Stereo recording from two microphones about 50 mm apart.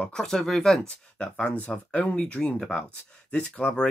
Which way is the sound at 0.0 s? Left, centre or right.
Centre.